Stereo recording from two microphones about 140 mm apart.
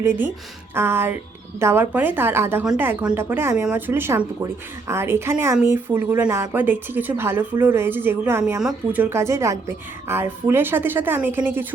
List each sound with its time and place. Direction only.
0.0 s a woman's voice: 15° right (ahead or behind)